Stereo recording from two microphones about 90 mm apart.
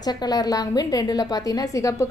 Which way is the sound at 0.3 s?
45° left (ahead or behind).